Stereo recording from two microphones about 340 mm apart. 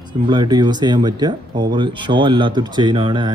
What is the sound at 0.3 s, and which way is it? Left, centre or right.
Speech, centre.